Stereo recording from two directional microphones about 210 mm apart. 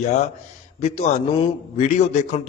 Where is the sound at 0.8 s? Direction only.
30° left (ahead or behind).